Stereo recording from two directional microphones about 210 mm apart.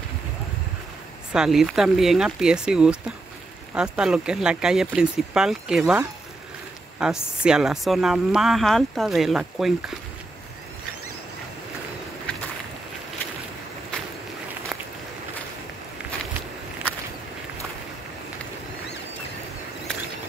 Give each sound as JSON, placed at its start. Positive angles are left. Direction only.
{"t": 1.3, "sound": "speech", "side_deg": 0}